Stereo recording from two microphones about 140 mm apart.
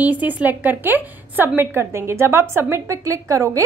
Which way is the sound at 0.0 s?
10° right (ahead or behind).